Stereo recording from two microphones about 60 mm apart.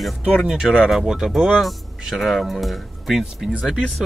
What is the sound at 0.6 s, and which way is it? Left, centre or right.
Speech, centre.